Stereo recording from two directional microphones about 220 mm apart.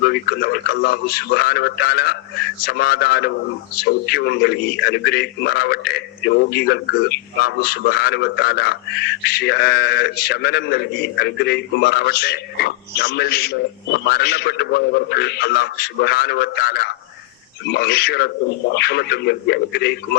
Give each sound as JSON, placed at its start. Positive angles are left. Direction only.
{"t": 0.0, "sound": "a man's voice", "side_deg": 45}